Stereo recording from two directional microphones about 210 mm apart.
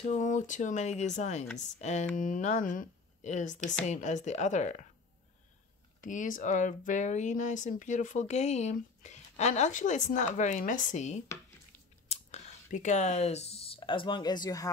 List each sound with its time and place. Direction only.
0.1 s speech: 35° left (ahead or behind)
5.9 s speech: 40° left (ahead or behind); by 14.7 s 20° left (ahead or behind)